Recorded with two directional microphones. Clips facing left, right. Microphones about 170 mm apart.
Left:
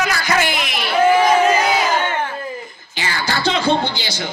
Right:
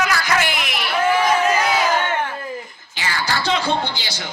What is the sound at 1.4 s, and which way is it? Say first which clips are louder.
Crowd: left 3 dB; 25° left (ahead or behind).